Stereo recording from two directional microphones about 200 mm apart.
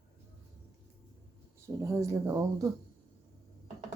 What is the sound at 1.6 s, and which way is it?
Speech, 15° right (ahead or behind).